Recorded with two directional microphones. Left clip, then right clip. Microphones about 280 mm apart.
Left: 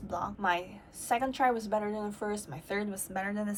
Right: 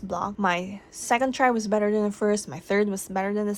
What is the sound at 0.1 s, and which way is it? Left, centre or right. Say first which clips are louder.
A woman's voice: right 5 dB; right.